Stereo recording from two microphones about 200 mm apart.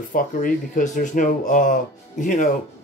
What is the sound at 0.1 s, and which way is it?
Speech, 40° left (ahead or behind).